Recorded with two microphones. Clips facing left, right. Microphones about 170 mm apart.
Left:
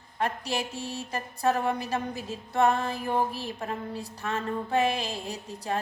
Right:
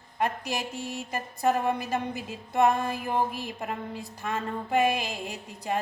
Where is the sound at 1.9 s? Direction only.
15° right (ahead or behind).